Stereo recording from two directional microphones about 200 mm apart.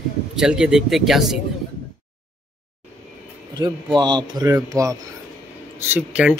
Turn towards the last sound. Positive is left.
turn(degrees=-5)  # may be behind; listen again after turning